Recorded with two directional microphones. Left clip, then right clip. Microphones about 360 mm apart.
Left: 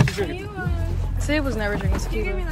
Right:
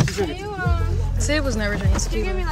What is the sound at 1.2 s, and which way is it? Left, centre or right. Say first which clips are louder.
Speech: right 1 dB; centre.